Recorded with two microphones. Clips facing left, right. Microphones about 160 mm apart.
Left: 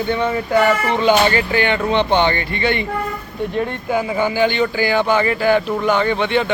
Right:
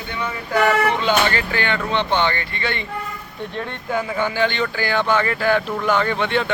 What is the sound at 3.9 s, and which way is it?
Speech, 5° left (ahead or behind).